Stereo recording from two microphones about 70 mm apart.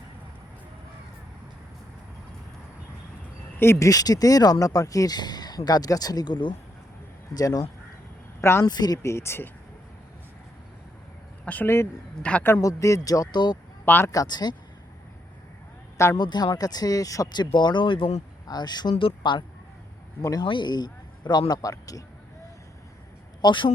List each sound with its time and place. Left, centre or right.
3.6 s speech: left
3.8 s speech: left
7.3 s speech: left
8.4 s speech: left
8.6 s speech: left
9.0 s speech: left
11.4 s a man's voice: left
12.6 s speech: left
13.8 s speech: left
14.1 s speech: left
16.1 s speech: left
17.3 s speech: left
20.2 s speech: left
23.4 s speech: left